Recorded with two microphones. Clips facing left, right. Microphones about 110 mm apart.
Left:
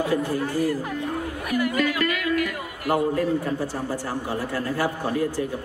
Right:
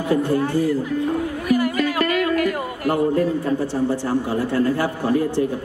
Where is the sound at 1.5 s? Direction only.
40° right (ahead or behind).